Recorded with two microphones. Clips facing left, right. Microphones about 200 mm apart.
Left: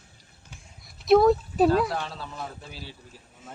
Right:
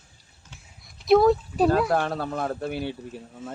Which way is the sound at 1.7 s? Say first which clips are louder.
Right 2 dB; 50° right (ahead or behind).